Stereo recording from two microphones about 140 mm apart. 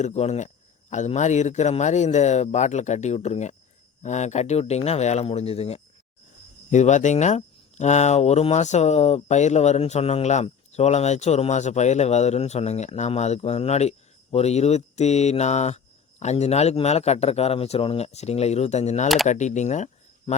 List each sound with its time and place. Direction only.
0.0 s speech: 55° left (ahead or behind)
6.7 s speech: 60° left (ahead or behind)
19.0 s speech: centre (ahead or behind)
19.3 s speech: 60° left (ahead or behind)